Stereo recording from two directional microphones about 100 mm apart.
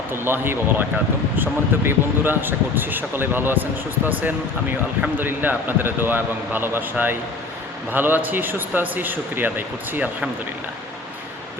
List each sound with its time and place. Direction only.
0.1 s speech: 25° right (ahead or behind)
5.1 s speech: 20° right (ahead or behind)